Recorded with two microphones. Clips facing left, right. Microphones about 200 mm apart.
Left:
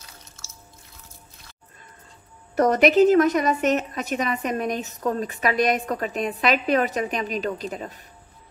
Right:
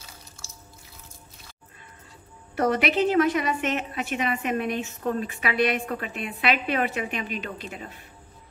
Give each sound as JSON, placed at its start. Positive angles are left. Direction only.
{"t": 2.5, "sound": "a woman's voice", "side_deg": 40}